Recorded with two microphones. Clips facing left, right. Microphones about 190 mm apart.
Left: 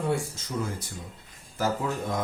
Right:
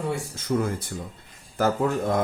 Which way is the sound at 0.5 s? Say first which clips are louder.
Right 8 dB; 60° right (ahead or behind).